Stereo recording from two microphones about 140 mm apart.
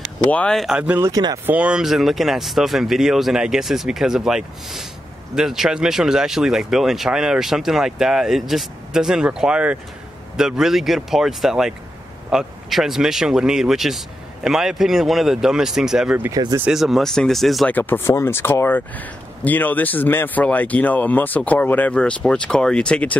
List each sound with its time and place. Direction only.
0.3 s speech: 5° left (ahead or behind); by 1.0 s 10° right (ahead or behind)
1.0 s speech: 25° right (ahead or behind)
1.4 s speech: 10° right (ahead or behind)
17.6 s speech: 15° left (ahead or behind)